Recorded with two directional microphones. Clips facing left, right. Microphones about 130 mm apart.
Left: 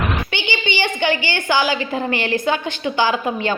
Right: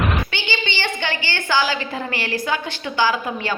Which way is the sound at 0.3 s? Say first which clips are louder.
Left 3 dB; 20° left (ahead or behind).